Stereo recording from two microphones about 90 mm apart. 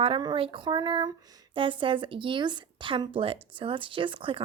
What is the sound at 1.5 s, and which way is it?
Speech, 70° right (ahead or behind).